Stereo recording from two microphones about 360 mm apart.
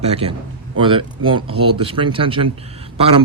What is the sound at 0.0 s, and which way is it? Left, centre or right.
Speech, centre.